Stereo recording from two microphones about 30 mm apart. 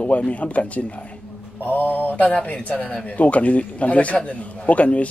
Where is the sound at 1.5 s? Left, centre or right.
Left.